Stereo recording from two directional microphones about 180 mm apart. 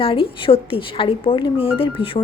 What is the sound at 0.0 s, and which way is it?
Speech, 30° left (ahead or behind).